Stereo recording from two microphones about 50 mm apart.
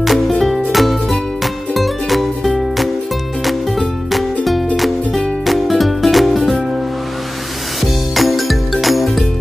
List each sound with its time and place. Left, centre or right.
0.0 s music: centre
7.8 s music: centre